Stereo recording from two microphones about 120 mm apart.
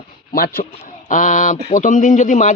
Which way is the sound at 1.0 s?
90° left.